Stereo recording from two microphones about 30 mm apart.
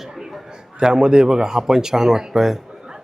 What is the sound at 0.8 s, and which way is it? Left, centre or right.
Speech, right.